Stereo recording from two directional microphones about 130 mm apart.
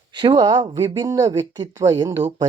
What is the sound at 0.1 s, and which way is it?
Speech, 35° right (ahead or behind).